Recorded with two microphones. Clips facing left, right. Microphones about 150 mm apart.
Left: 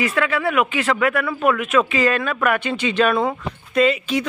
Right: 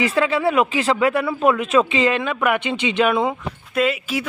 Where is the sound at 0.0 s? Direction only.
30° right (ahead or behind).